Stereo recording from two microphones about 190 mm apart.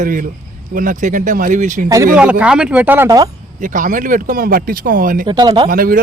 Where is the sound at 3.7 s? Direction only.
45° right (ahead or behind).